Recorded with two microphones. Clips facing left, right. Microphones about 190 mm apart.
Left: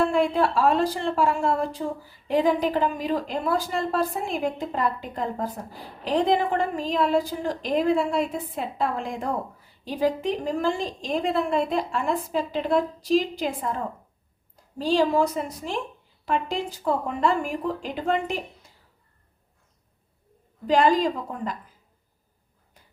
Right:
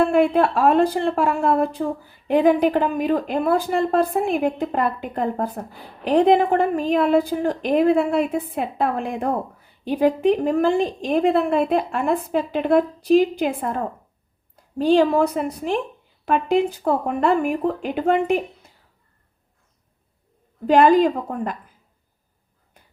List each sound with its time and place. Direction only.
0.0 s speech: 60° right (ahead or behind)
20.7 s speech: 60° right (ahead or behind)